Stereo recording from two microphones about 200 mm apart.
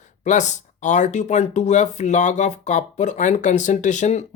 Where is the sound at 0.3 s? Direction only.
35° left (ahead or behind).